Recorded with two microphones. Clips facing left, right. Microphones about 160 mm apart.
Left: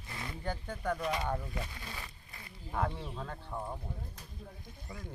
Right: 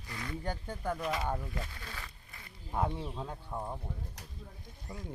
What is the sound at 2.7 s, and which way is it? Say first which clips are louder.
Speech: right 2 dB; 10° right (ahead or behind).